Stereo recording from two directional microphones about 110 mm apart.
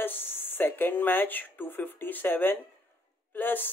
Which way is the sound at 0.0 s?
20° left (ahead or behind).